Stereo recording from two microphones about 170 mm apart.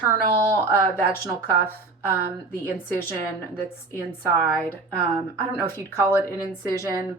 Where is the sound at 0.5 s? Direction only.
15° left (ahead or behind).